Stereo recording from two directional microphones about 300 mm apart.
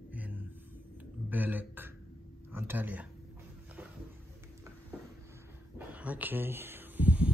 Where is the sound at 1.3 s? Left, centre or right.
Centre.